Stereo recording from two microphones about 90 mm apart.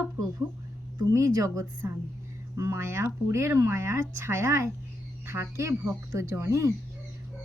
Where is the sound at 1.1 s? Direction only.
35° right (ahead or behind).